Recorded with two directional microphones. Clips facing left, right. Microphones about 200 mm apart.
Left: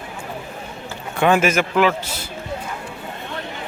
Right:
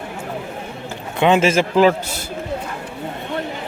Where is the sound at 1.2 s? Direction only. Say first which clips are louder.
Right 2 dB; 25° right (ahead or behind).